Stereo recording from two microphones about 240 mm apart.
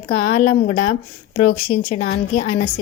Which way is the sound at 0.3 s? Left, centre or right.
Left.